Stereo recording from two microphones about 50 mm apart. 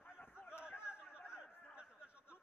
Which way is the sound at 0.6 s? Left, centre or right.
Left.